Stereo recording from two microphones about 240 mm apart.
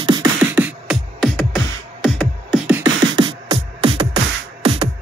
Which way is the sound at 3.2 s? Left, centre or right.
Right.